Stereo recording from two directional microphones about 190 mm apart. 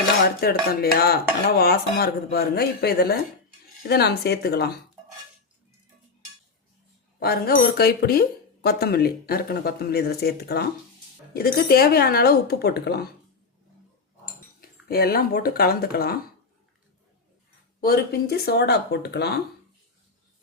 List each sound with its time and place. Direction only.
0.7 s speech: 55° left (ahead or behind)
7.2 s speech: 55° left (ahead or behind)
14.6 s speech: 50° left (ahead or behind)
17.7 s speech: 55° left (ahead or behind)